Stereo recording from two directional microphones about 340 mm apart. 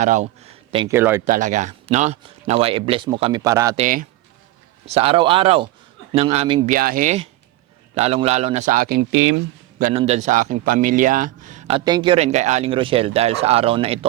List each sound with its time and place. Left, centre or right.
0.0 s speech: right
1.2 s speech: right
4.9 s speech: centre